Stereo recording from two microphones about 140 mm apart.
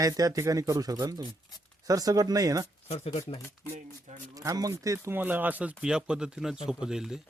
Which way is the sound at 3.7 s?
65° right (ahead or behind).